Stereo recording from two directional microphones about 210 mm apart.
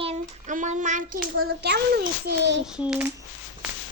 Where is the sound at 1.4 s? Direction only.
50° right (ahead or behind).